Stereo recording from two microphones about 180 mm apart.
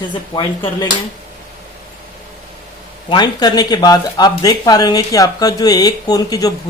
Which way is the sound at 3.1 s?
25° left (ahead or behind).